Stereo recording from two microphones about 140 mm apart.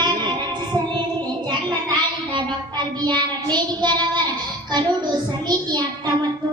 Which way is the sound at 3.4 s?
30° right (ahead or behind).